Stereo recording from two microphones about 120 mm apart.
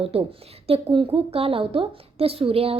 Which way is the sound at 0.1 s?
55° right (ahead or behind).